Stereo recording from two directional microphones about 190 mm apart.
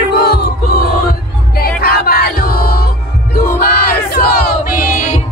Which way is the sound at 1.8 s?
50° left (ahead or behind).